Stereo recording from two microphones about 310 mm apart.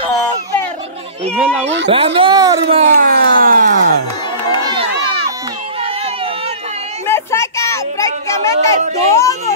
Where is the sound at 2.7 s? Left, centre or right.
Right.